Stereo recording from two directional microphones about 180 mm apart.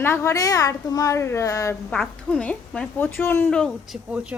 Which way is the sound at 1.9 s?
5° left (ahead or behind).